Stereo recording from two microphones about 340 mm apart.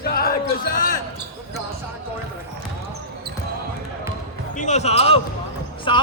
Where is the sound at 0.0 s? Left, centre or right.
Left.